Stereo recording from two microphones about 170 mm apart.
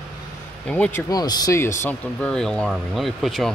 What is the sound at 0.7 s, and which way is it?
Speech, 5° left (ahead or behind).